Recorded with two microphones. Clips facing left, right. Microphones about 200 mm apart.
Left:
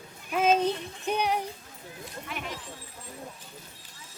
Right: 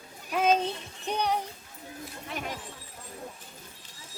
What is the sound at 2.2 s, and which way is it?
Speech, 40° right (ahead or behind).